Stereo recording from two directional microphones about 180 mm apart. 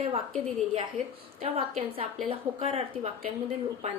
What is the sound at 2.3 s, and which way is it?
Speech, 30° right (ahead or behind).